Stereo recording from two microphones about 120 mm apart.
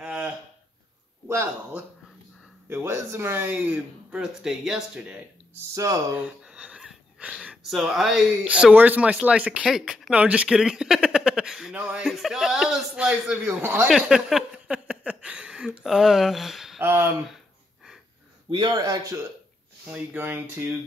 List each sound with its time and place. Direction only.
0.0 s a sound: 10° right (ahead or behind)
1.2 s speech: 20° right (ahead or behind)
13.6 s speech: 20° right (ahead or behind)
13.8 s a sound: 5° right (ahead or behind)
16.8 s speech: 20° right (ahead or behind)
18.5 s a man's voice: 35° right (ahead or behind)
19.9 s speech: 15° right (ahead or behind)